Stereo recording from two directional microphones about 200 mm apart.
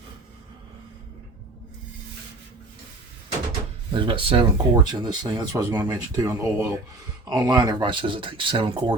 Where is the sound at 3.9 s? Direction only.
25° right (ahead or behind).